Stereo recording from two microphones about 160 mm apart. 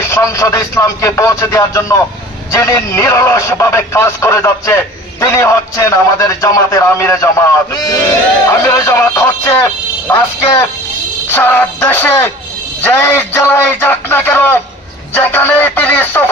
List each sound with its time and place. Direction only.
0.0 s speech: 20° left (ahead or behind)
15.1 s music: 10° left (ahead or behind)